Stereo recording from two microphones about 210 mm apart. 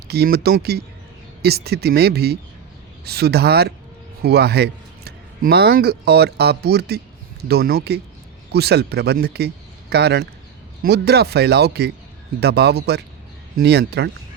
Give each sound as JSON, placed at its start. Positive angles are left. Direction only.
{"t": 0.1, "sound": "speech", "side_deg": -50}